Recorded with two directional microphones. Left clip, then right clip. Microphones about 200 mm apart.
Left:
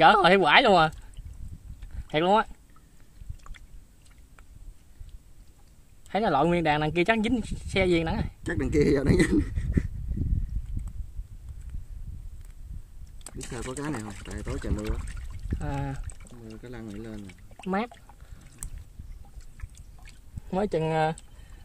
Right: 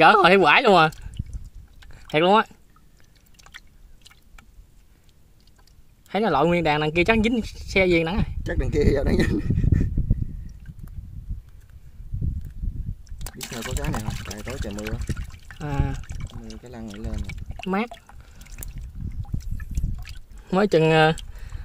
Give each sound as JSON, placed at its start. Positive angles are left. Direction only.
{"t": 0.0, "sound": "speech", "side_deg": -30}
{"t": 2.0, "sound": "speech", "side_deg": -25}
{"t": 3.3, "sound": "chewing", "side_deg": -55}
{"t": 6.0, "sound": "speech", "side_deg": -20}
{"t": 8.5, "sound": "speech", "side_deg": 5}
{"t": 14.4, "sound": "speech", "side_deg": -5}
{"t": 15.6, "sound": "speech", "side_deg": -20}
{"t": 16.6, "sound": "speech", "side_deg": 5}
{"t": 17.6, "sound": "speech", "side_deg": -20}
{"t": 20.4, "sound": "speech", "side_deg": -45}